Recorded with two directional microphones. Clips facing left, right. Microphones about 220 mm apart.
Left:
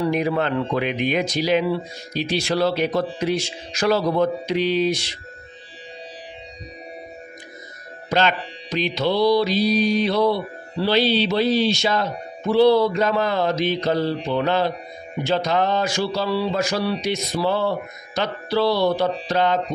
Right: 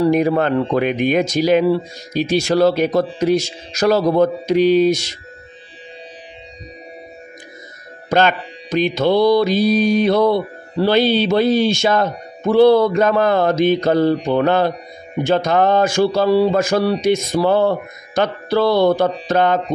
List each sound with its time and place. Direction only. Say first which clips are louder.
0.0 s mantra: right 6 dB; 45° right (ahead or behind)
8.1 s mantra: right 5 dB; 50° right (ahead or behind)